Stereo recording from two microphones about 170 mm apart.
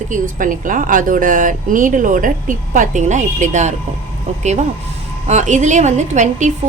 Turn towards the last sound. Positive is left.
turn(degrees=-45)  # may be behind; listen again after turning